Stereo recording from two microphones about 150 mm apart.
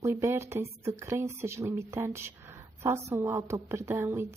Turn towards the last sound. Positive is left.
turn(degrees=-15)  # may be behind; listen again after turning